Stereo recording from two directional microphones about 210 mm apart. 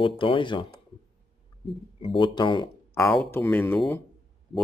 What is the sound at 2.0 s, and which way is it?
Speech, 25° left (ahead or behind).